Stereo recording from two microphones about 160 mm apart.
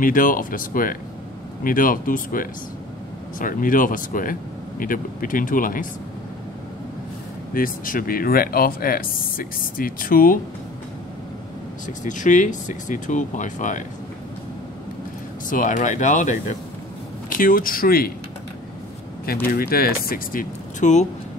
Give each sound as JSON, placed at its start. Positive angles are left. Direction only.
{"t": 0.0, "sound": "speech", "side_deg": 60}
{"t": 7.5, "sound": "speech", "side_deg": 60}
{"t": 12.0, "sound": "speech", "side_deg": 50}
{"t": 15.5, "sound": "speech", "side_deg": 50}
{"t": 19.2, "sound": "speech", "side_deg": 65}